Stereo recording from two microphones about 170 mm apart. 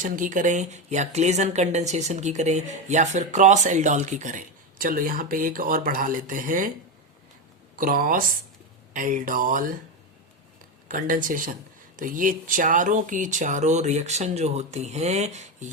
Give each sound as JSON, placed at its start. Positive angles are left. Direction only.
{"t": 0.0, "sound": "speech", "side_deg": -50}
{"t": 7.8, "sound": "speech", "side_deg": -55}
{"t": 10.8, "sound": "speech", "side_deg": -50}